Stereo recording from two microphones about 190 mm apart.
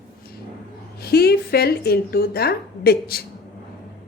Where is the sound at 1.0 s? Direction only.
55° left (ahead or behind).